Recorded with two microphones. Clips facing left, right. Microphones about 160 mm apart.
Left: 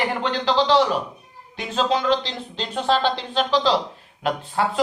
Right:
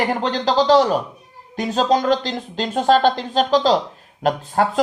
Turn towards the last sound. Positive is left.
turn(degrees=-45)  # may be behind; listen again after turning